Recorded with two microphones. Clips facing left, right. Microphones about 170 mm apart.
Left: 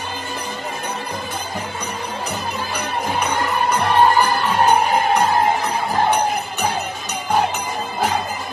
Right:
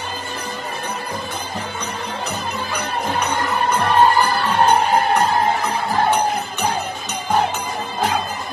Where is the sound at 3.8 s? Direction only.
15° left (ahead or behind).